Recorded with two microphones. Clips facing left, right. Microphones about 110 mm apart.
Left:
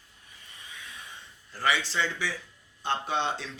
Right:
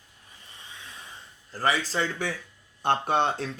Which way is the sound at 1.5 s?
40° right (ahead or behind).